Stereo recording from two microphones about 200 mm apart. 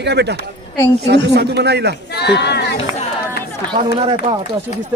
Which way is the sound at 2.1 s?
55° left (ahead or behind).